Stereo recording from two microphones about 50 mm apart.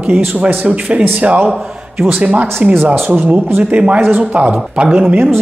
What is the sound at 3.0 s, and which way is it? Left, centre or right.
Speech, right.